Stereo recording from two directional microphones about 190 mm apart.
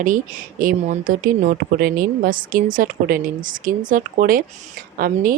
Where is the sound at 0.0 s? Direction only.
45° right (ahead or behind).